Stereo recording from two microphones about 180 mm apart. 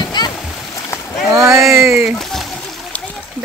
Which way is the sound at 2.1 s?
Centre (ahead or behind).